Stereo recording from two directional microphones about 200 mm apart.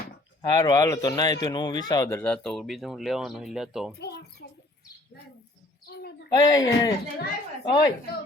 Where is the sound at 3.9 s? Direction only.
55° left (ahead or behind).